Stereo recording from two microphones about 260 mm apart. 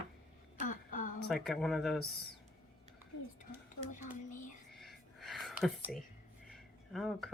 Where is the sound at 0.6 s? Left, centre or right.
Left.